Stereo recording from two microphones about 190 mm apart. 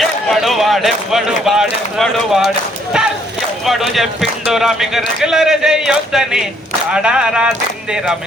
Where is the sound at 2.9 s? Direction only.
5° right (ahead or behind).